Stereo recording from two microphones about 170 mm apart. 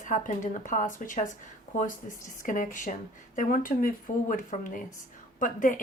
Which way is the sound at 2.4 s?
50° left (ahead or behind).